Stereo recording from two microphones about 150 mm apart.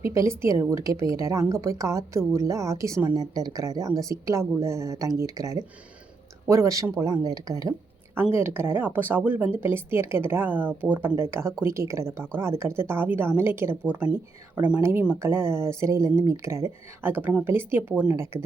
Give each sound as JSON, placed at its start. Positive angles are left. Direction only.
{"t": 0.0, "sound": "a woman's voice", "side_deg": -20}